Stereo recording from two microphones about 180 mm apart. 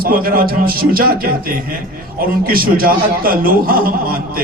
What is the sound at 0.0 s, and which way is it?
A man's voice, 55° right (ahead or behind).